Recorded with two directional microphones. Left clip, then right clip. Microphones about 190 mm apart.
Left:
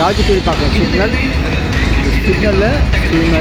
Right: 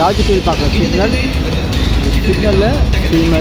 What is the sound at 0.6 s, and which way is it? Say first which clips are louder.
Speech: left 1 dB; 30° left (ahead or behind).